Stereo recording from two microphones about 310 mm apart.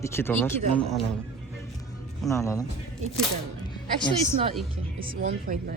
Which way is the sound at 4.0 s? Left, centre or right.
Centre.